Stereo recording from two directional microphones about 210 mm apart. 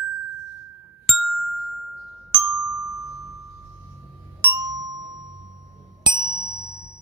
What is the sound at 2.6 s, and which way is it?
Glockenspiel, 90° left.